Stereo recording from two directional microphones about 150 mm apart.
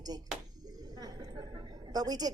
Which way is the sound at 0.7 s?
25° right (ahead or behind).